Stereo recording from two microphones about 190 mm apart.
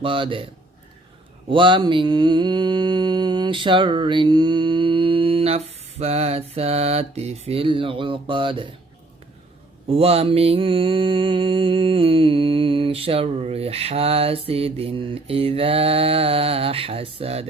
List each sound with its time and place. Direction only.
0.0 s mantra: 25° right (ahead or behind)
1.5 s mantra: 25° right (ahead or behind)
9.9 s mantra: 30° right (ahead or behind)